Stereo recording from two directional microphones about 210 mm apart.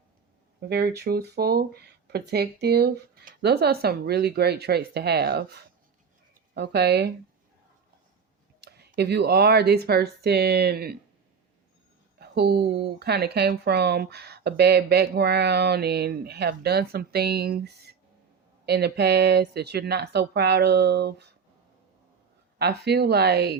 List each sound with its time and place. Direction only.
0.6 s speech: 50° right (ahead or behind)
8.6 s speech: 50° right (ahead or behind)
12.2 s a sound: 50° right (ahead or behind)
13.0 s speech: 50° right (ahead or behind)
22.5 s speech: 50° right (ahead or behind)